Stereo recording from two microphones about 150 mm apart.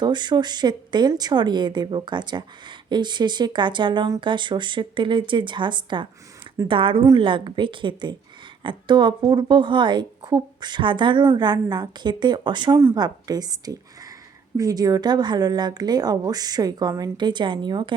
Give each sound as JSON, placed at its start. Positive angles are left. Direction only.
{"t": 0.0, "sound": "speech", "side_deg": -30}